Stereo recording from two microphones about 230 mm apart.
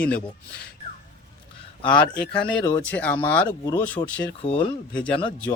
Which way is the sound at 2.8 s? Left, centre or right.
Centre.